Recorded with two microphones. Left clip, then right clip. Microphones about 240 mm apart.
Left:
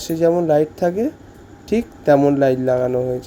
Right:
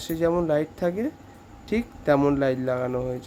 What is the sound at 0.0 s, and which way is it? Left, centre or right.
Speech, centre.